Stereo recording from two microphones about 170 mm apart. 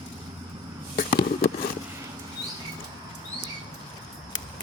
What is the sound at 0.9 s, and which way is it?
Fireworks, 70° left (ahead or behind).